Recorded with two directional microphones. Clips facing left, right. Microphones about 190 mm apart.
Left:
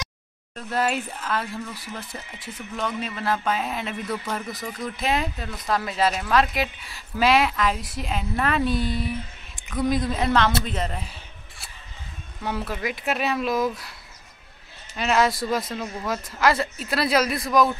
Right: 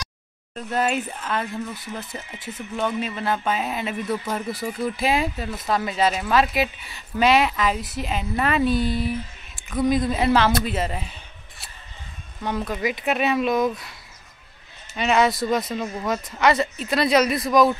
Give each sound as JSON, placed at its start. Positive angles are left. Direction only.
{"t": 0.6, "sound": "speech", "side_deg": 0}
{"t": 1.5, "sound": "speech", "side_deg": -20}
{"t": 2.7, "sound": "speech", "side_deg": -5}
{"t": 12.4, "sound": "speech", "side_deg": 5}
{"t": 15.0, "sound": "speech", "side_deg": 0}